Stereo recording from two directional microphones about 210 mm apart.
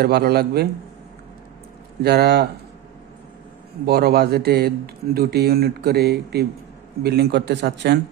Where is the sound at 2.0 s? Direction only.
50° right (ahead or behind).